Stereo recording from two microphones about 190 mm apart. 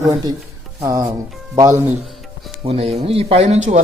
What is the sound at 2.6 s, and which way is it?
Speech, 30° right (ahead or behind).